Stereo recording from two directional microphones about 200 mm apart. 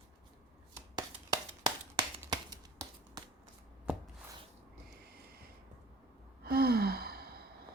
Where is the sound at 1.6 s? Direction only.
20° right (ahead or behind).